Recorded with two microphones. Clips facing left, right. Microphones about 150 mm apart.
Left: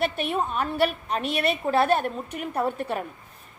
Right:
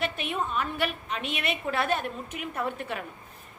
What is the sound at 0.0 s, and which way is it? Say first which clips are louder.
A woman's voice: left 5 dB; 35° left (ahead or behind).